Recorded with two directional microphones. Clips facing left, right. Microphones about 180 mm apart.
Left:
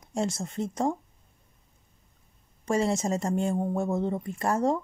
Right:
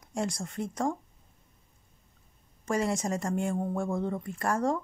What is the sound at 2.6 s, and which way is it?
Speech, 25° left (ahead or behind).